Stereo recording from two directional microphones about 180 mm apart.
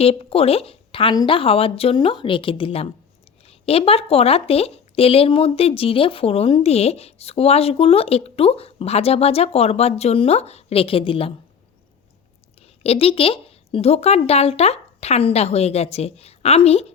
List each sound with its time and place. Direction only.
0.0 s speech: 35° left (ahead or behind)
12.8 s speech: 35° left (ahead or behind)